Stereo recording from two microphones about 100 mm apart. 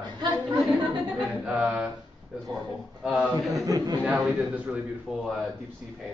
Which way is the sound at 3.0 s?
10° right (ahead or behind).